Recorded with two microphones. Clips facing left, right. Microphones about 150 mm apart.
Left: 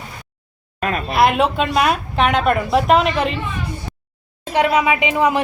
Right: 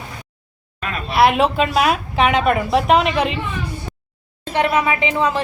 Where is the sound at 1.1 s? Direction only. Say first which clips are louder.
Right 2 dB; centre (ahead or behind).